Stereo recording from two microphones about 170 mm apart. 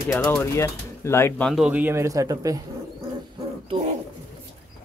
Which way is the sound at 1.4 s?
5° right (ahead or behind).